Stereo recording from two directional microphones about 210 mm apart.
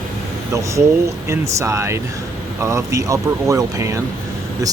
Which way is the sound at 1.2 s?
15° right (ahead or behind).